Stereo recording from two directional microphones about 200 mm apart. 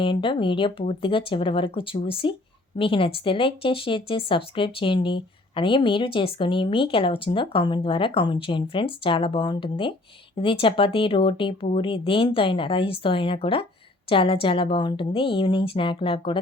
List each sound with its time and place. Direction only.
0.0 s speech: 25° left (ahead or behind)